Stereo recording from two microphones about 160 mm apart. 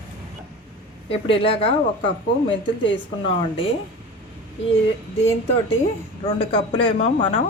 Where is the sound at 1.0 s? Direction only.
35° left (ahead or behind).